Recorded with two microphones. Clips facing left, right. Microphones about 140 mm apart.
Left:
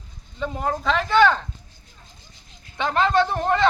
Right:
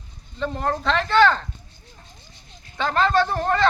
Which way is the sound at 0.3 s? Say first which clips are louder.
Right 1 dB; 10° left (ahead or behind).